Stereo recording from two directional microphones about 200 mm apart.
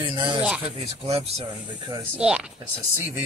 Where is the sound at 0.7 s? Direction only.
30° right (ahead or behind).